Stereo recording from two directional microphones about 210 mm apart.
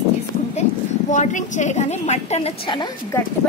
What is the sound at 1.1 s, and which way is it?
A woman's voice, 35° left (ahead or behind).